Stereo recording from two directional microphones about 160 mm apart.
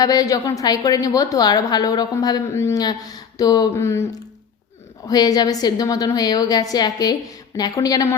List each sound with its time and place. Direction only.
0.0 s a woman's voice: 20° left (ahead or behind)